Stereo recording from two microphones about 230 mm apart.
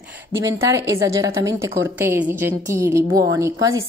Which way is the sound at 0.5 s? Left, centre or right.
Centre.